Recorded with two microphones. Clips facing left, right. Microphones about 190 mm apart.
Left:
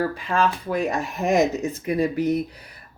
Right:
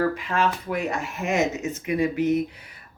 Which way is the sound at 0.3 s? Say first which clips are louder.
Left 2 dB; 30° left (ahead or behind).